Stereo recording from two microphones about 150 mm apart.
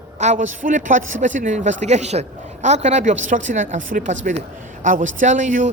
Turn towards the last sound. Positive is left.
turn(degrees=-55)  # may be behind; listen again after turning